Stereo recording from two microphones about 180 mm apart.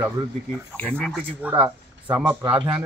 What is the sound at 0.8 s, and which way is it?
Speech, 5° left (ahead or behind).